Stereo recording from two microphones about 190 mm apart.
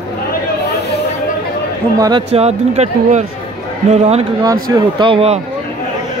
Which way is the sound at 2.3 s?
35° right (ahead or behind).